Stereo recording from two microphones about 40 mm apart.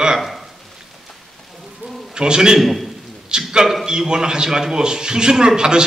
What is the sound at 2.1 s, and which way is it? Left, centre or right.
Speech, centre.